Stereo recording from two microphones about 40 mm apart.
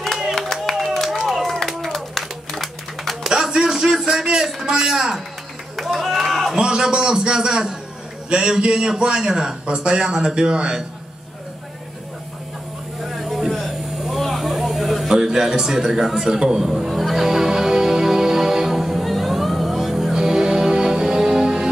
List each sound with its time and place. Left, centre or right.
0.3 s a sound: centre
1.2 s run: centre
2.0 s clapping: centre
3.3 s a sound: centre
4.6 s a man's voice: centre
5.8 s run: centre
6.5 s a man's voice: centre
13.0 s vehicle: centre
15.0 s a man's voice: centre
16.9 s music: centre